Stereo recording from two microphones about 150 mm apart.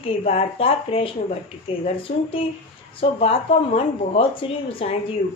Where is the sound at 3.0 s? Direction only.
40° left (ahead or behind).